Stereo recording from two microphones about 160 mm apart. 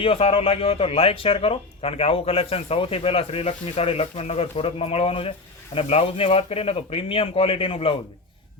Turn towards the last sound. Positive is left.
turn(degrees=35)  # may be behind; listen again after turning